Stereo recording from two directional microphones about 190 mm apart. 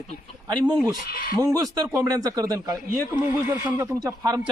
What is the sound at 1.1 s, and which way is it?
Speech, 50° left (ahead or behind).